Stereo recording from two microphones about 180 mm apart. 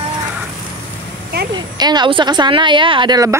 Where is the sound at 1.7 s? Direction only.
25° right (ahead or behind).